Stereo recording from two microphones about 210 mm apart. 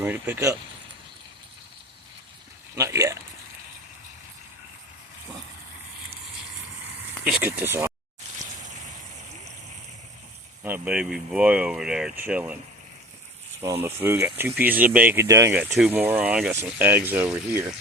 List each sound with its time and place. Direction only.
0.0 s speech: 10° right (ahead or behind)
2.7 s speech: 15° right (ahead or behind)
7.3 s speech: 5° right (ahead or behind)
10.6 s speech: 5° right (ahead or behind)
13.7 s speech: 10° right (ahead or behind)